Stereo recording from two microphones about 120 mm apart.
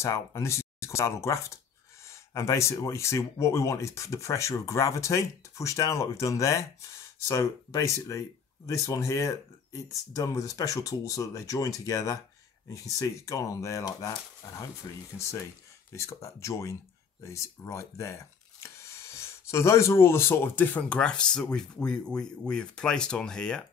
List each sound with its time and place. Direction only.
0.0 s speech: 25° left (ahead or behind); by 23.6 s 5° left (ahead or behind)